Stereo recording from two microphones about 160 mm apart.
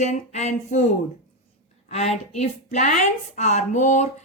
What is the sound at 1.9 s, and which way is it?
A woman's voice, 40° left (ahead or behind).